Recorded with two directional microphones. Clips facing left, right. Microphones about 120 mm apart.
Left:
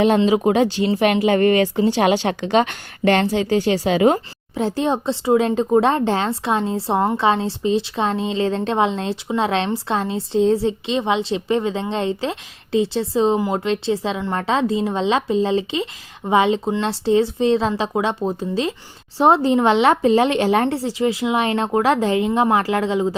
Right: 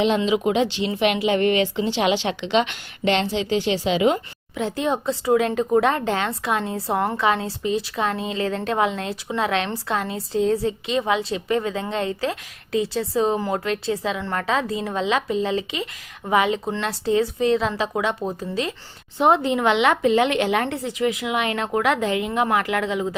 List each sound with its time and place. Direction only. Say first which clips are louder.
0.3 s a woman's voice: left 4 dB; 40° left (ahead or behind)
14.2 s a woman's voice: left 3 dB; 15° left (ahead or behind)
14.4 s a woman's voice: left 6 dB; 30° left (ahead or behind)